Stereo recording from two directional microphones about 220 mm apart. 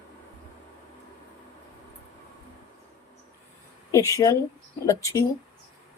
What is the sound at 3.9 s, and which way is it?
Speech, 15° left (ahead or behind).